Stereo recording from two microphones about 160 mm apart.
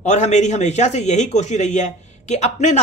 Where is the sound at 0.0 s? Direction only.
45° left (ahead or behind).